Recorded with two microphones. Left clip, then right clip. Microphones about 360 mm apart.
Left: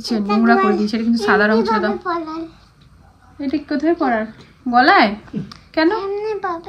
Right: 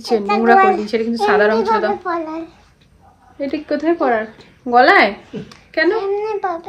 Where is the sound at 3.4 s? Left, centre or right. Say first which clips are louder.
Right 1 dB; centre.